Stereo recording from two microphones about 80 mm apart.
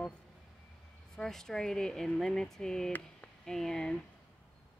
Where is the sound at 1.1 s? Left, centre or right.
Centre.